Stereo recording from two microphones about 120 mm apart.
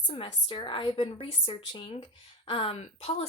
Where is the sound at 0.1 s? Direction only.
45° left (ahead or behind).